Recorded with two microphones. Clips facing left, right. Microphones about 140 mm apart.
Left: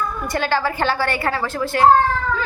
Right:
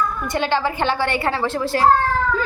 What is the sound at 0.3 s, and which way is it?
A child's voice, 20° right (ahead or behind).